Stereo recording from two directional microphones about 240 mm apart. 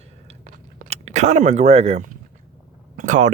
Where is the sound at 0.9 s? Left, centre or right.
Right.